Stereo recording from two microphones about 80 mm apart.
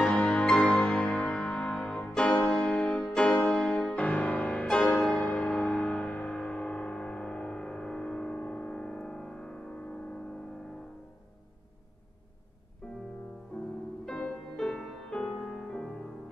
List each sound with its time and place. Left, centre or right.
0.0 s music: centre
12.8 s music: centre
14.0 s music: centre